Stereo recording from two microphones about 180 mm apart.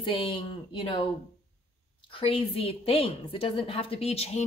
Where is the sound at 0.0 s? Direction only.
30° left (ahead or behind).